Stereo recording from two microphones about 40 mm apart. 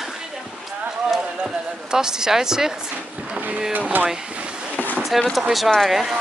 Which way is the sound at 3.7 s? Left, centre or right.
Right.